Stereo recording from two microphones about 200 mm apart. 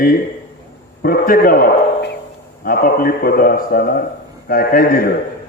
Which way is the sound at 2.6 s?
45° left (ahead or behind).